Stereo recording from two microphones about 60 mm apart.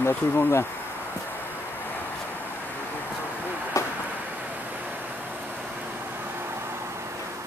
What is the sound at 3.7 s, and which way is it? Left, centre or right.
Vehicle, left.